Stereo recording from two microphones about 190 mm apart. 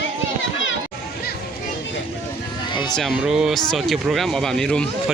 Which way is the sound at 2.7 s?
25° left (ahead or behind).